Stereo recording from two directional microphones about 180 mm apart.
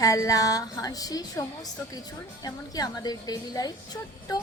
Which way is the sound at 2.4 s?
20° left (ahead or behind).